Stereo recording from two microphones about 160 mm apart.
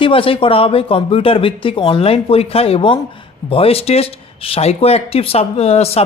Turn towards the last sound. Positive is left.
turn(degrees=40)  # may be behind; listen again after turning